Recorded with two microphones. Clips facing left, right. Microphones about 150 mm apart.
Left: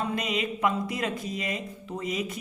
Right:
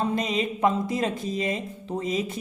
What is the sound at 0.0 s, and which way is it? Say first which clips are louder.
Speech: right 4 dB; 30° right (ahead or behind).